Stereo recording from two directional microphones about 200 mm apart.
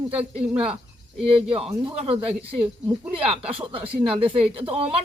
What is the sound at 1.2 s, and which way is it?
Speech, 30° right (ahead or behind).